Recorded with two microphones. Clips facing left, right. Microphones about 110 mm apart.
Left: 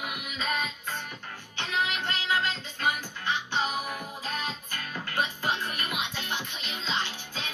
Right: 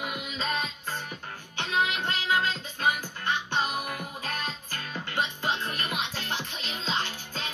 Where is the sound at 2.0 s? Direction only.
45° right (ahead or behind).